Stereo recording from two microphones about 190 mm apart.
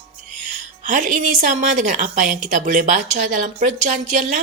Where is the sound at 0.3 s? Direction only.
40° right (ahead or behind).